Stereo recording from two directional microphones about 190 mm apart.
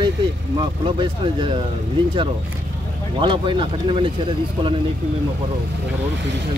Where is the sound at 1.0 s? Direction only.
25° right (ahead or behind).